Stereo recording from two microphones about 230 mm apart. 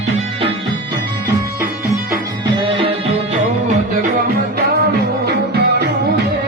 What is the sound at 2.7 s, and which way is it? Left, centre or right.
Music, right.